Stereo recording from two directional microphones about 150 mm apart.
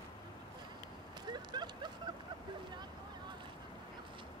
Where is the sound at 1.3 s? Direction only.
30° right (ahead or behind).